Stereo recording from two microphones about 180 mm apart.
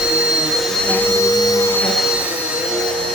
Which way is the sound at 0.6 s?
5° left (ahead or behind).